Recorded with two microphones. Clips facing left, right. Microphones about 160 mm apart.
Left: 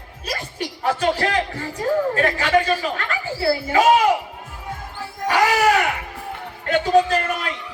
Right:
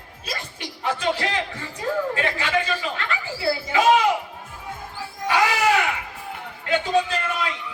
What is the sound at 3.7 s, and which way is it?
Speech, 45° left (ahead or behind).